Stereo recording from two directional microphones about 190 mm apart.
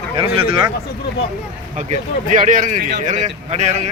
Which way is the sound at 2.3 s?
45° right (ahead or behind).